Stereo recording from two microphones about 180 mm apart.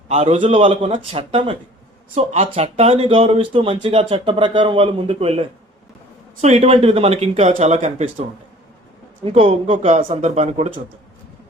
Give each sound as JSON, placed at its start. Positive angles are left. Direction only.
{"t": 0.1, "sound": "speech", "side_deg": -35}
{"t": 6.4, "sound": "speech", "side_deg": -35}
{"t": 9.2, "sound": "speech", "side_deg": -35}